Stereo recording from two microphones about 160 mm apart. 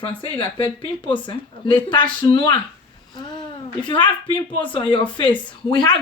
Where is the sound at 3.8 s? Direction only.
30° left (ahead or behind).